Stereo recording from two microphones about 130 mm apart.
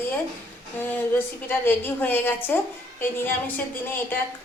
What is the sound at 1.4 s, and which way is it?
A woman's voice, 15° left (ahead or behind).